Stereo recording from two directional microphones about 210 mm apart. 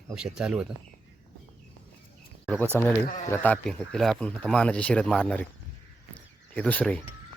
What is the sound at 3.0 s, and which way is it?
Speech, 35° left (ahead or behind).